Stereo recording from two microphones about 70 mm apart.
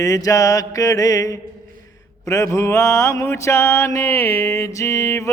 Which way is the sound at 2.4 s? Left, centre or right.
Left.